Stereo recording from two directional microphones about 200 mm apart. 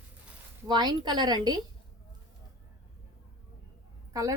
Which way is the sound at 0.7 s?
20° right (ahead or behind).